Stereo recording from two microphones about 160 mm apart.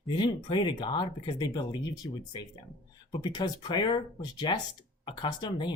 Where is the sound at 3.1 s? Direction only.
30° left (ahead or behind).